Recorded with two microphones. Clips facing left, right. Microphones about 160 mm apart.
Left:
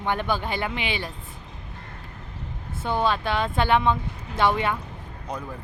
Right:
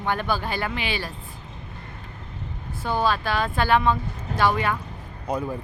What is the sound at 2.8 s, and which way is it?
Speech, 20° left (ahead or behind).